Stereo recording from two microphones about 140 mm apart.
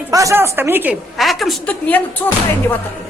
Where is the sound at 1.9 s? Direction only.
10° left (ahead or behind).